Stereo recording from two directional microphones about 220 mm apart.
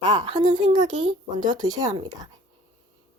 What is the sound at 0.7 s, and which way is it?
Speech, 35° right (ahead or behind).